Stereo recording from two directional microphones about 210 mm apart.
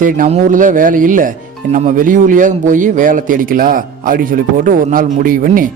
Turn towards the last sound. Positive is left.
turn(degrees=-40)  # may be behind; listen again after turning